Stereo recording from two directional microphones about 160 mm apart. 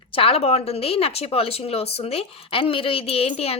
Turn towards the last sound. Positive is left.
turn(degrees=40)  # may be behind; listen again after turning